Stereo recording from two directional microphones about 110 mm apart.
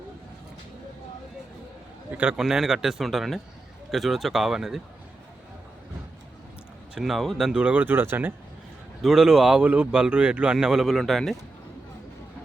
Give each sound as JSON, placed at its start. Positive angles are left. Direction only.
{"t": 2.1, "sound": "speech", "side_deg": -5}
{"t": 6.9, "sound": "speech", "side_deg": -5}
{"t": 7.6, "sound": "speech", "side_deg": -15}
{"t": 9.0, "sound": "speech", "side_deg": -5}